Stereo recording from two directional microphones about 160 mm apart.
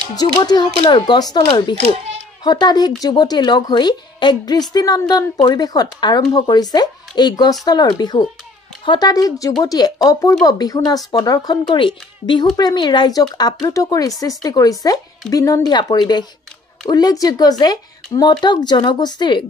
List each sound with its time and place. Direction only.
0.1 s a woman's voice: 25° left (ahead or behind)